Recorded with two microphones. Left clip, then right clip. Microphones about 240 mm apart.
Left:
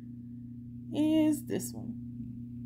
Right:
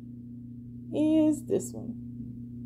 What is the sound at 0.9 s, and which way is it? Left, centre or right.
Speech, left.